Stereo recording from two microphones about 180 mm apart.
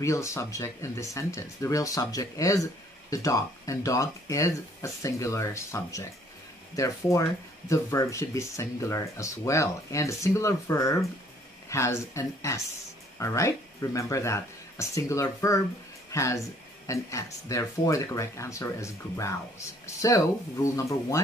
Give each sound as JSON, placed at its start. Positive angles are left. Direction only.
{"t": 0.0, "sound": "speech", "side_deg": 15}